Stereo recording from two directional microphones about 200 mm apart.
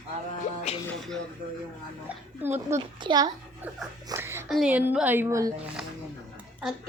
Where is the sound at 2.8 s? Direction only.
20° right (ahead or behind).